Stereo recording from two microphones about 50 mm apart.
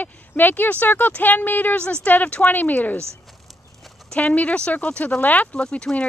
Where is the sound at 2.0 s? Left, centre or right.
Left.